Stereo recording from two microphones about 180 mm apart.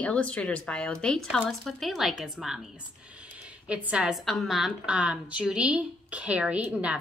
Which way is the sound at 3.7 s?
5° right (ahead or behind).